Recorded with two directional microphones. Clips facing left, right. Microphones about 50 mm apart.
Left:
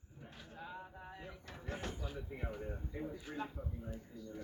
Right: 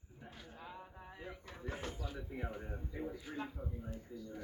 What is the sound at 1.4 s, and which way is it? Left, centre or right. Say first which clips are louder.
Vehicle: left 1 dB; centre.